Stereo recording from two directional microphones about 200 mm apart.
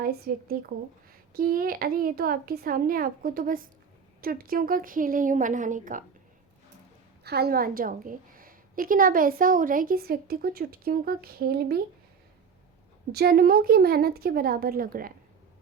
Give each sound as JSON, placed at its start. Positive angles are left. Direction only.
{"t": 0.3, "sound": "a woman's voice", "side_deg": -45}
{"t": 7.3, "sound": "a woman's voice", "side_deg": -50}
{"t": 13.1, "sound": "a woman's voice", "side_deg": -50}